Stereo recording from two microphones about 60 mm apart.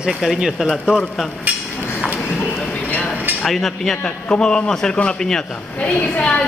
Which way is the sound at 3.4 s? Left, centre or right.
Centre.